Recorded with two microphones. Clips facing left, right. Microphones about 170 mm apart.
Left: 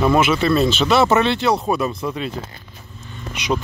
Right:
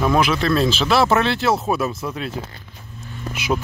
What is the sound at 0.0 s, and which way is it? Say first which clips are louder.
Speech: left 2 dB; centre (ahead or behind).